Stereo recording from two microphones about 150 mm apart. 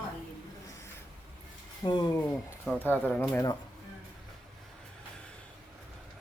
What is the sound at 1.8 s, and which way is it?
Speech, 30° left (ahead or behind).